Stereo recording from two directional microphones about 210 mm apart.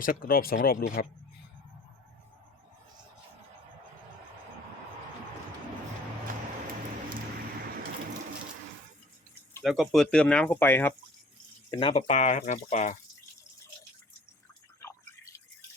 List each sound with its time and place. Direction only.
0.0 s speech: 45° left (ahead or behind)
9.6 s speech: centre (ahead or behind)
11.7 s speech: 25° left (ahead or behind)
14.8 s drip: 10° left (ahead or behind)